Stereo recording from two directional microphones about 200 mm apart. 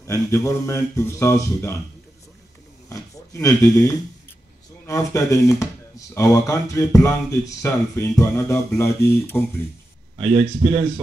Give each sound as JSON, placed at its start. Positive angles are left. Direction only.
{"t": 0.0, "sound": "speech", "side_deg": 15}
{"t": 2.9, "sound": "speech", "side_deg": 15}
{"t": 10.1, "sound": "speech", "side_deg": -25}